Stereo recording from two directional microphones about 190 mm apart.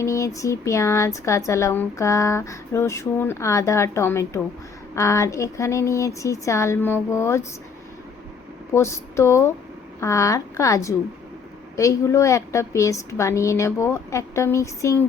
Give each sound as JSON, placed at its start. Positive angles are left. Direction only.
{"t": 0.0, "sound": "speech", "side_deg": 15}
{"t": 8.7, "sound": "speech", "side_deg": 15}